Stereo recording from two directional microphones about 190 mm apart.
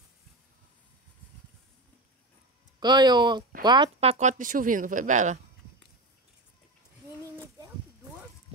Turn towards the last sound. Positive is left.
turn(degrees=-15)  # may be behind; listen again after turning